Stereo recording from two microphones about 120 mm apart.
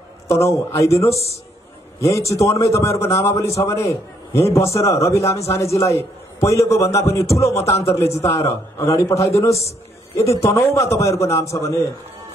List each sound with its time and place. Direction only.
0.5 s a man's voice: 25° left (ahead or behind)